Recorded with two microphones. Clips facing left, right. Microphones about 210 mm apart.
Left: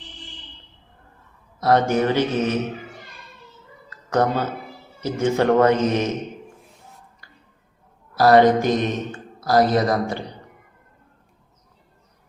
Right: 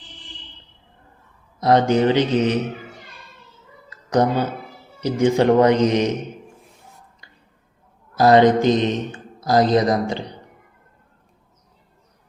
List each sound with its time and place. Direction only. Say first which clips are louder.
1.5 s speech: right 2 dB; 20° right (ahead or behind)
3.8 s a sound: right 2 dB; 15° right (ahead or behind)
4.9 s speech: right 3 dB; 15° right (ahead or behind)
8.1 s speech: right 1 dB; 20° right (ahead or behind)